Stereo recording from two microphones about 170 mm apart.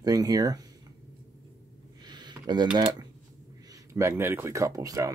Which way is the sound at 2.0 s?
25° right (ahead or behind).